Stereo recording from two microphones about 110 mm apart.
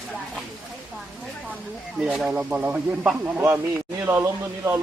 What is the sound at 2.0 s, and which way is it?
A man's voice, centre (ahead or behind).